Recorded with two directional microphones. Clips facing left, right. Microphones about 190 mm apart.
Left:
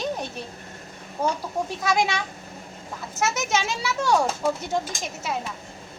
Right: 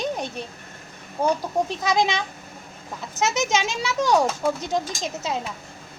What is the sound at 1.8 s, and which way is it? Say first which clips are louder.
A woman's voice: left 2 dB; 20° right (ahead or behind).